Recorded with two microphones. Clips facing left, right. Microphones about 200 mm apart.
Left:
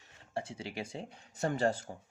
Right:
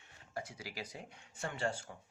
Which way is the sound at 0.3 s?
25° left (ahead or behind).